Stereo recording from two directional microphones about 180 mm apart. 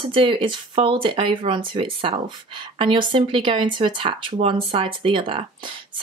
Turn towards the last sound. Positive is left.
turn(degrees=-30)  # may be behind; listen again after turning